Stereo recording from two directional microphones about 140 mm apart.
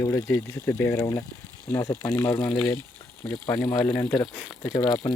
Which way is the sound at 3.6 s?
30° left (ahead or behind).